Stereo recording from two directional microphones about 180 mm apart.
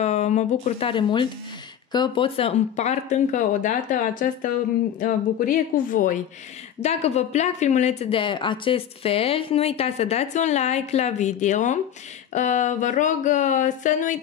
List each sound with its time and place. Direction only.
0.0 s speech: 40° left (ahead or behind)
6.8 s speech: 35° left (ahead or behind)